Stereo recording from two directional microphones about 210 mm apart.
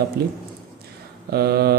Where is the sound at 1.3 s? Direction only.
50° right (ahead or behind).